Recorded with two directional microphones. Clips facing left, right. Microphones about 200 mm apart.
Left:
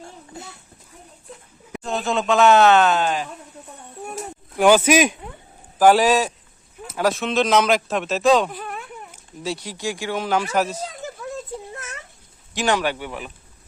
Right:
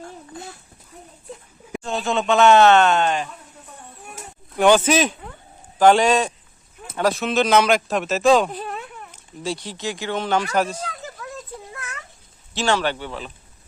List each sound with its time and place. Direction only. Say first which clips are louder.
1.8 s speech: even; centre (ahead or behind)
4.5 s speech: left 1 dB; 5° left (ahead or behind)
8.4 s wail: right 2 dB; 20° right (ahead or behind)
9.1 s speech: right 1 dB; 5° left (ahead or behind)
12.5 s speech: even; 15° left (ahead or behind)